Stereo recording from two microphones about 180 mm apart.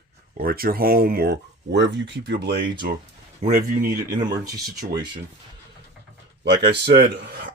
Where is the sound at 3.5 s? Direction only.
50° right (ahead or behind).